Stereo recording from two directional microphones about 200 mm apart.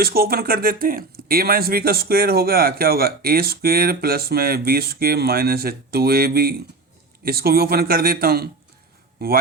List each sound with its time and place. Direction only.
0.0 s speech: 50° right (ahead or behind)